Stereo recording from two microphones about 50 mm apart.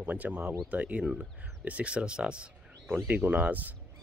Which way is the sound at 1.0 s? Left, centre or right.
Centre.